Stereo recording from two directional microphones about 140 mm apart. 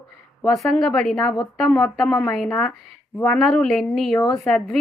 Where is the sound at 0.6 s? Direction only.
Centre (ahead or behind).